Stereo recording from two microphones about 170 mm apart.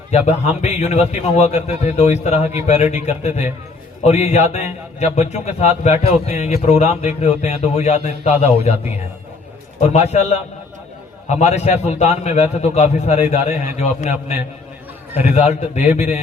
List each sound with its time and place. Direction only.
0.1 s speech: 40° left (ahead or behind)
9.9 s speech: 40° left (ahead or behind)
15.4 s a man's voice: 40° left (ahead or behind)